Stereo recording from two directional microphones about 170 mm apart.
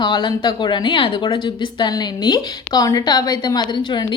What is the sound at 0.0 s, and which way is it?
Speech, 25° left (ahead or behind).